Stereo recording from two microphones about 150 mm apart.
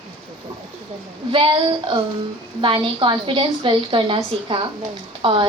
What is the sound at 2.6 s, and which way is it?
A woman's voice, 35° right (ahead or behind).